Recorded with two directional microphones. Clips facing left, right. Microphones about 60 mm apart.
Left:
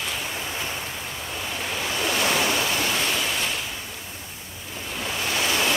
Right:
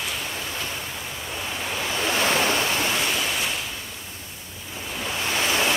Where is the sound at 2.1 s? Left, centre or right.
Right.